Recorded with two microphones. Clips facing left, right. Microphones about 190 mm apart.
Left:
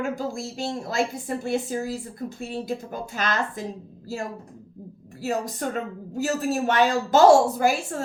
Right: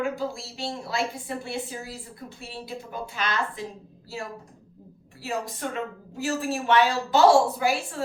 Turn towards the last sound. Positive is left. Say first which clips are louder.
# left 3 dB
turn(degrees=45)  # may be behind; listen again after turning